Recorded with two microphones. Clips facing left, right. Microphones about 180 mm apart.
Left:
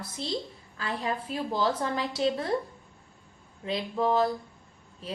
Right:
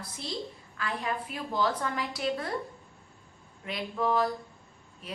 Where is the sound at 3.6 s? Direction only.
30° left (ahead or behind).